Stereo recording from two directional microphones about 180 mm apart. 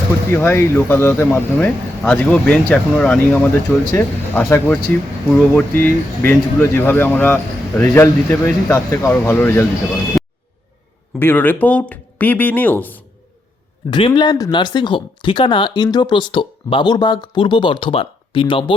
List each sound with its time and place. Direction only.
0.3 s speech: 15° left (ahead or behind)
10.1 s a sound: centre (ahead or behind)
11.2 s speech: 10° left (ahead or behind)
13.9 s speech: 25° left (ahead or behind)